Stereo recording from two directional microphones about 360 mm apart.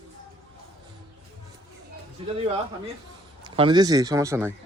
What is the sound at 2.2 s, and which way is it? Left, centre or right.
A man's voice, centre.